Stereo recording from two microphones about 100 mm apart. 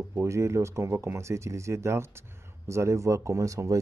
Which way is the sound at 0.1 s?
30° right (ahead or behind).